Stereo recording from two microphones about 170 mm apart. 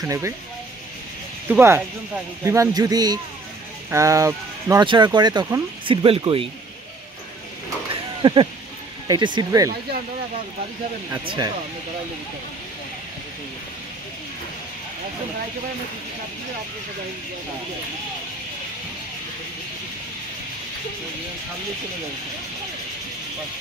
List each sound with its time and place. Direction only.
1.5 s speech: 10° right (ahead or behind)
6.0 s speech: 35° right (ahead or behind)
7.9 s a sound: 30° right (ahead or behind)
9.0 s speech: 25° right (ahead or behind)
11.2 s speech: 25° right (ahead or behind)